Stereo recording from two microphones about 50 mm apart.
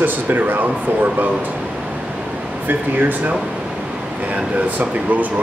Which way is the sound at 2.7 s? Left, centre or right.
Right.